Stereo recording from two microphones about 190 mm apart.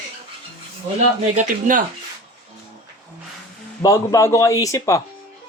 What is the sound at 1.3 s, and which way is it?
Speech, 45° right (ahead or behind).